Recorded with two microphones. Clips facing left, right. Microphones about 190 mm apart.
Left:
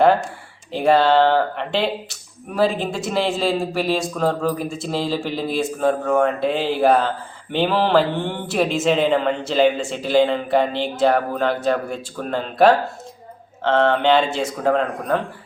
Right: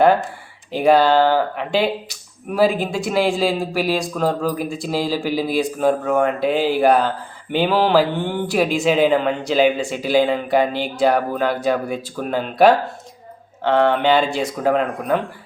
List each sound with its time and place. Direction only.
0.7 s speech: centre (ahead or behind)